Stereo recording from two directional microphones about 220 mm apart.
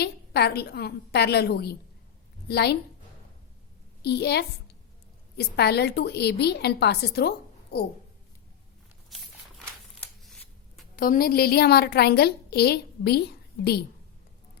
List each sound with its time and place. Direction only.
0.0 s a woman's voice: 45° left (ahead or behind)
4.0 s a woman's voice: 50° left (ahead or behind)
9.1 s a sound: centre (ahead or behind)
10.0 s shuffling cards: 5° left (ahead or behind)
10.9 s a woman's voice: 40° left (ahead or behind)